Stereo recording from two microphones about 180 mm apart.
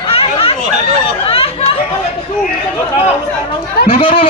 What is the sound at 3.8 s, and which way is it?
Speech, 30° left (ahead or behind).